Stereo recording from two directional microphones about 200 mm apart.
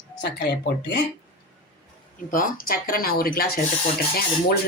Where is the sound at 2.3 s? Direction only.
45° left (ahead or behind).